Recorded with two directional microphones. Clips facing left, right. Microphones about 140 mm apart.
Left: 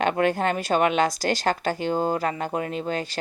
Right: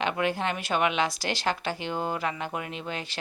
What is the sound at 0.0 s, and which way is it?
Speech, 45° left (ahead or behind).